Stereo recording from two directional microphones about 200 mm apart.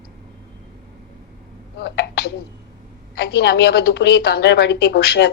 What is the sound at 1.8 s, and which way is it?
A woman's voice, 55° left (ahead or behind).